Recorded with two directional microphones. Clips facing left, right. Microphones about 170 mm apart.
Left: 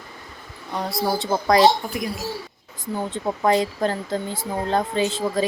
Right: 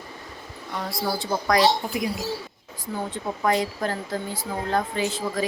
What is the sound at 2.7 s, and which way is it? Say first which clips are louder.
Speech: left 3 dB; 20° left (ahead or behind).